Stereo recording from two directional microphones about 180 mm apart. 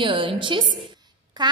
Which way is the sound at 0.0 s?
30° right (ahead or behind).